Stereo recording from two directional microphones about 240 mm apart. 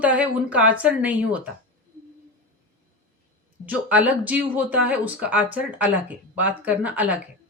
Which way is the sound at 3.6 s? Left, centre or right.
Centre.